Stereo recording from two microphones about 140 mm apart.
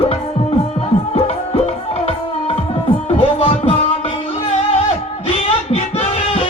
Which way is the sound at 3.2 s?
45° left (ahead or behind).